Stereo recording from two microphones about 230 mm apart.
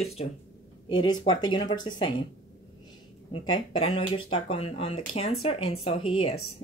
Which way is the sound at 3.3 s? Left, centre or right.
Left.